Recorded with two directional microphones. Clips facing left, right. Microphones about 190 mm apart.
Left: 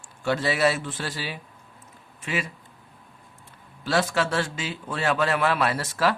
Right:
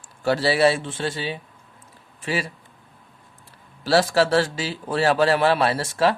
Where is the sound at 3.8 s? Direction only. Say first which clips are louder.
Right 5 dB; 35° right (ahead or behind).